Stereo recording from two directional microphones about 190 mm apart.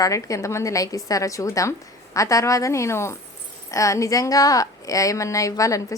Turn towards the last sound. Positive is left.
turn(degrees=15)  # may be behind; listen again after turning